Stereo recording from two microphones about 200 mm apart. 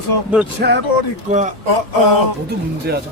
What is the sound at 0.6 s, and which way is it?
Speech, 55° right (ahead or behind).